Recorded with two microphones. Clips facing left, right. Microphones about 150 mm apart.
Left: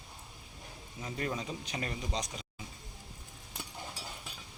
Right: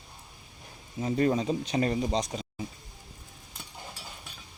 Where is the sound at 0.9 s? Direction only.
30° right (ahead or behind).